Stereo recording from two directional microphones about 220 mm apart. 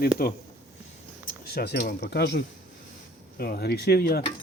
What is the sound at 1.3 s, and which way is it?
Cutlery, 45° left (ahead or behind).